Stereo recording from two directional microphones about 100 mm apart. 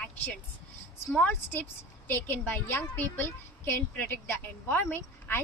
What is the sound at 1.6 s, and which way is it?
A woman's voice, 20° left (ahead or behind).